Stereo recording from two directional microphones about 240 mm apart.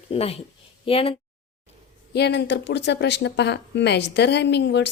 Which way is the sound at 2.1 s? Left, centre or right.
Left.